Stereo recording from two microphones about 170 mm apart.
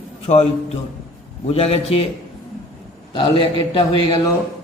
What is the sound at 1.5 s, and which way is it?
Speech, 35° left (ahead or behind).